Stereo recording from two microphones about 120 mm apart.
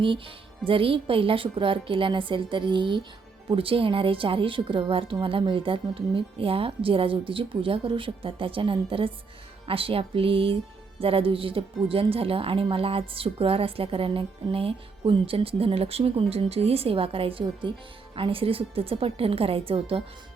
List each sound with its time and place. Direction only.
0.7 s speech: 50° right (ahead or behind)